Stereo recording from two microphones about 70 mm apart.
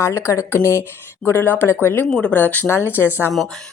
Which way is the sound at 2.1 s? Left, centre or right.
Centre.